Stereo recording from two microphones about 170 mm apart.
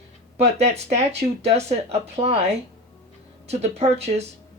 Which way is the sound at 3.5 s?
40° right (ahead or behind).